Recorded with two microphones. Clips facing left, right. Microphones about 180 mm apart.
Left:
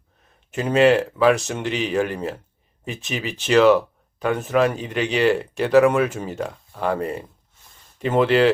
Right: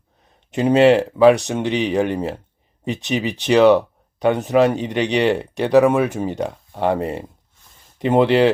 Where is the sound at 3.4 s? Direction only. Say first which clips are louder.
Right 2 dB; 15° right (ahead or behind).